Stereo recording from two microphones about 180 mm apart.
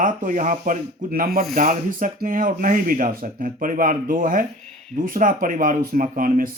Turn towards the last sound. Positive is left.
turn(degrees=-50)  # may be behind; listen again after turning